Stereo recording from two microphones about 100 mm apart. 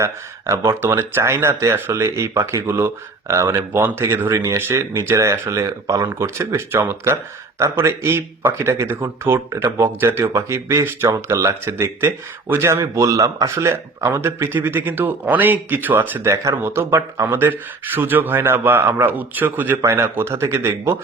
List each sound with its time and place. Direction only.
0.0 s speech: 30° right (ahead or behind)